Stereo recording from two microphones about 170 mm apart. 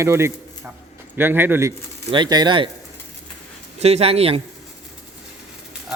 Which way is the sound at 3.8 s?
35° right (ahead or behind).